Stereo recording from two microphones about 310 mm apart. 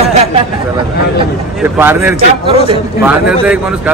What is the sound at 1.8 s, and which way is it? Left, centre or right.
A man's voice, centre.